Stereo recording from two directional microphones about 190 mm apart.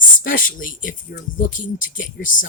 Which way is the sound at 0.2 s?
45° left (ahead or behind).